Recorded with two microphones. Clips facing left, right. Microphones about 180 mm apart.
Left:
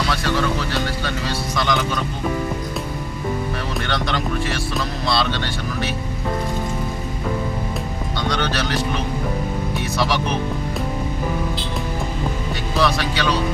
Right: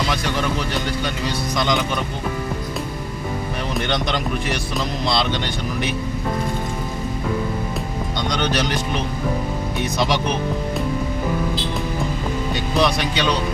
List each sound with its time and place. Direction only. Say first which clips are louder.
0.1 s music: left 1 dB; 15° right (ahead or behind)
1.5 s speech: even; 20° right (ahead or behind)
3.8 s speech: right 2 dB; 20° right (ahead or behind)
8.3 s speech: right 1 dB; 15° right (ahead or behind)
12.7 s speech: even; 20° right (ahead or behind)